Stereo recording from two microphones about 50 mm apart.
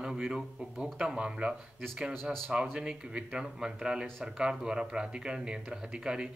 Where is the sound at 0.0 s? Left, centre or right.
Centre.